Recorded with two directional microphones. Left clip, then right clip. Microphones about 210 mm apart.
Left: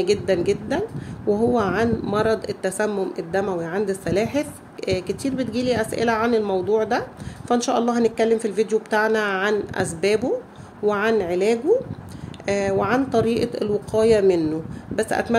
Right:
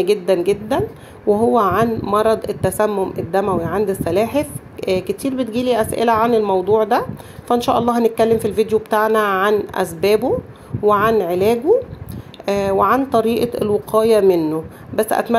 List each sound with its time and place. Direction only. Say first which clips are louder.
0.0 s a woman's voice: right 4 dB; 5° right (ahead or behind)